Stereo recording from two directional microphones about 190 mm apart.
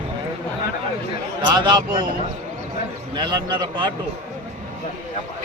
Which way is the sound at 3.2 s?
25° right (ahead or behind).